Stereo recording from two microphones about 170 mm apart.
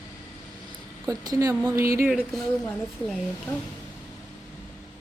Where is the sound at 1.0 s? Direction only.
20° right (ahead or behind).